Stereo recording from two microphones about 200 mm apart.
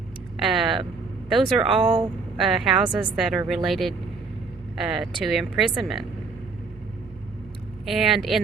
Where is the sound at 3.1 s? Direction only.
Centre (ahead or behind).